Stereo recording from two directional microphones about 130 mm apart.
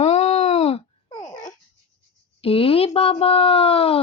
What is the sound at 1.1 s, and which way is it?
Babbling, 30° left (ahead or behind).